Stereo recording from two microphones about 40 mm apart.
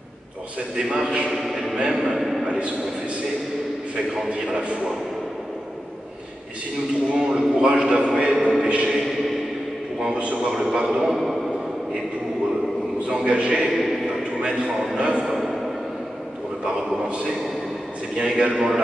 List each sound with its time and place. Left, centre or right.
0.8 s a man's voice: right
1.3 s choir: centre
1.8 s a man's voice: centre
7.1 s a man's voice: right
8.2 s a sound: right
8.6 s music: right
10.0 s a man's voice: right
10.4 s a man's voice: centre
13.3 s a man's voice: right
15.0 s a man's voice: right
15.2 s a sound: centre
16.6 s a man's voice: right
18.3 s a man's voice: centre